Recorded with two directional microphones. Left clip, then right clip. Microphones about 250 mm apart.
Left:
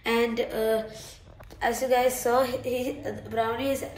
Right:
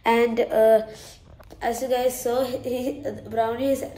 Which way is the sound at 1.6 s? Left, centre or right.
Centre.